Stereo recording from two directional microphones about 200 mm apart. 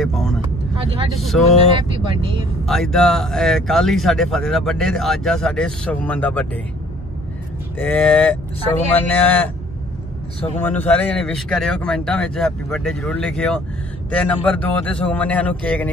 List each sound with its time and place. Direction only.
0.0 s vehicle: centre (ahead or behind)
0.7 s speech: 25° right (ahead or behind)
1.1 s speech: centre (ahead or behind)
1.7 s speech: 25° right (ahead or behind)
2.6 s speech: centre (ahead or behind)
7.7 s speech: 10° left (ahead or behind)
10.6 s speech: 10° left (ahead or behind)